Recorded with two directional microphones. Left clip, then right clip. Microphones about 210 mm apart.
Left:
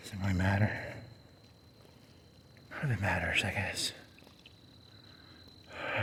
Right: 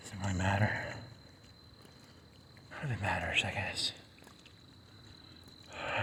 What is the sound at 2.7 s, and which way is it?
A man's voice, 50° left (ahead or behind).